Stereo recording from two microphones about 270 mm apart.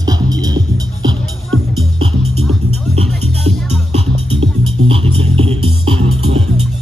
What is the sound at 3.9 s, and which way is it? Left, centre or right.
Music, right.